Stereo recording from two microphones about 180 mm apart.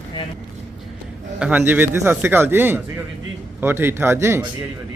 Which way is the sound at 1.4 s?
10° right (ahead or behind).